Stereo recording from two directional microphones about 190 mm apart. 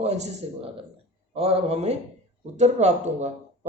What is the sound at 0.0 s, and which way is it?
Speech, 35° right (ahead or behind).